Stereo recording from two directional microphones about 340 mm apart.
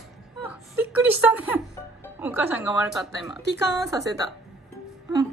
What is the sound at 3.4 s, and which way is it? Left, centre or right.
Speech, left.